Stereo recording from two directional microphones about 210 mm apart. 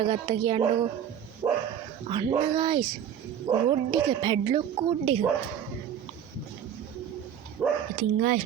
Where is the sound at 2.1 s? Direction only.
20° right (ahead or behind).